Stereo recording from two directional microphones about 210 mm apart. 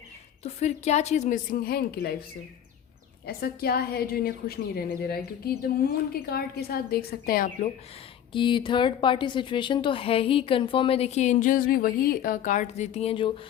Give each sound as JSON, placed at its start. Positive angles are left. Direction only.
{"t": 0.4, "sound": "a woman's voice", "side_deg": 30}
{"t": 3.2, "sound": "a woman's voice", "side_deg": 45}
{"t": 8.3, "sound": "speech", "side_deg": 25}